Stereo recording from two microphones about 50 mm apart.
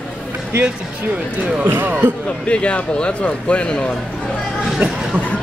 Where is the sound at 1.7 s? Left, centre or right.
Right.